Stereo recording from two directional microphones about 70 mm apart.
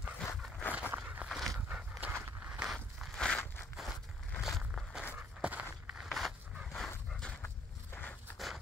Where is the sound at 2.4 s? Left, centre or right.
Centre.